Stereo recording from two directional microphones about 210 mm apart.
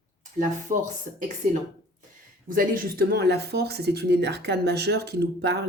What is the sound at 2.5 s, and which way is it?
Speech, 40° right (ahead or behind).